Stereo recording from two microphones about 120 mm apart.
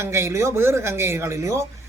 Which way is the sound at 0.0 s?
20° right (ahead or behind).